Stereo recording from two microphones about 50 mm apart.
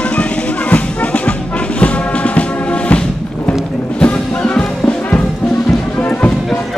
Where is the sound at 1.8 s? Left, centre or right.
Left.